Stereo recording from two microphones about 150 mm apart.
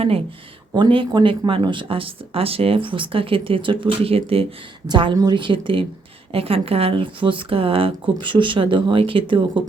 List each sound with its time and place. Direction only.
0.7 s speech: 35° right (ahead or behind)